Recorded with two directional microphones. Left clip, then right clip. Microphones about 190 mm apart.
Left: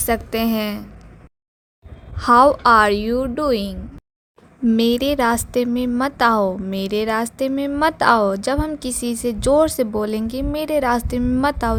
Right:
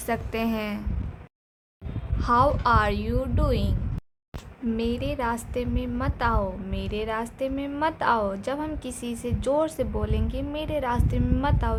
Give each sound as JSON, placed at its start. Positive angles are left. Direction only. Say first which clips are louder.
{"t": 0.0, "sound": "a woman's voice", "louder": "left 7 dB", "side_deg": 30}
{"t": 2.1, "sound": "a woman's voice", "louder": "left 9 dB", "side_deg": 40}
{"t": 4.8, "sound": "a woman's voice", "louder": "left 10 dB", "side_deg": 40}